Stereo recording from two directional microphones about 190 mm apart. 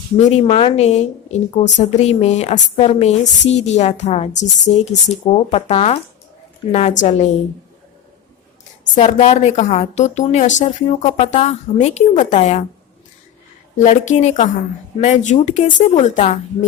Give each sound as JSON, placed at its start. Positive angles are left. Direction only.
{"t": 0.3, "sound": "a woman's voice", "side_deg": 30}
{"t": 9.0, "sound": "a woman's voice", "side_deg": 35}
{"t": 13.7, "sound": "a woman's voice", "side_deg": 40}